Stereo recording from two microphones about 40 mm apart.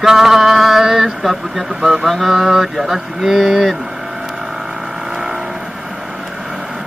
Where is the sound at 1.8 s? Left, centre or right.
Centre.